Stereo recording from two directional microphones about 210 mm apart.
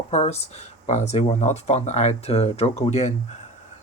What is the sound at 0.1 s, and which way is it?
Speech, 30° left (ahead or behind).